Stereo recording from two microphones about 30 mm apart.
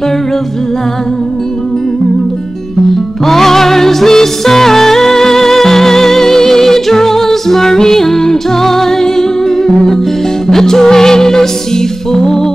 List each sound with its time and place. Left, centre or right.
3.3 s music: centre